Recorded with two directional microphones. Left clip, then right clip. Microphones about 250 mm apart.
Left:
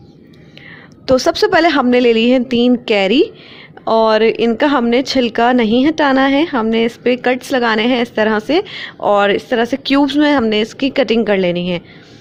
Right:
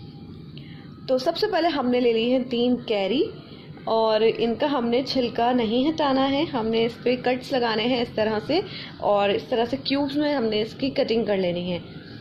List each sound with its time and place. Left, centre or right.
1.0 s speech: left